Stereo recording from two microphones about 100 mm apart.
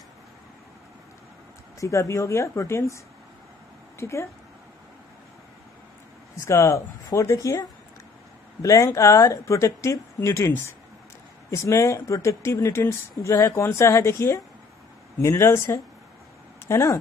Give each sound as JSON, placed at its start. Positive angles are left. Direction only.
{"t": 1.8, "sound": "speech", "side_deg": 30}
{"t": 4.0, "sound": "speech", "side_deg": 30}
{"t": 6.4, "sound": "speech", "side_deg": 30}
{"t": 8.6, "sound": "speech", "side_deg": 30}
{"t": 11.5, "sound": "speech", "side_deg": 30}